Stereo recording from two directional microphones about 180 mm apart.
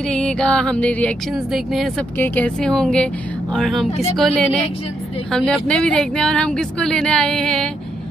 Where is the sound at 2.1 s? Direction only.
10° left (ahead or behind).